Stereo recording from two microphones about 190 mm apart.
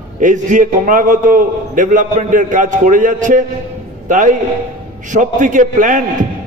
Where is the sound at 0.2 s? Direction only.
40° right (ahead or behind).